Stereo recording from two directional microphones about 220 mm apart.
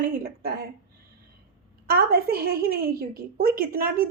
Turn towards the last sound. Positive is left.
turn(degrees=-40)  # may be behind; listen again after turning